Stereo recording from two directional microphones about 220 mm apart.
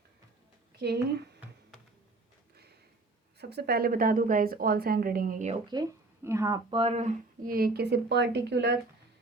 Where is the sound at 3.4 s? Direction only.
50° right (ahead or behind).